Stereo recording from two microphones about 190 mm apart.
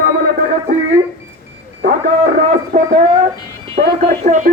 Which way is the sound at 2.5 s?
45° right (ahead or behind).